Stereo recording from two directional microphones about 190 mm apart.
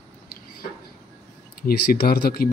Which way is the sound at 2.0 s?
50° left (ahead or behind).